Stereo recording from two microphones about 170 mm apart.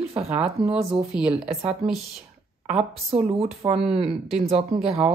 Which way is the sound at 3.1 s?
40° right (ahead or behind).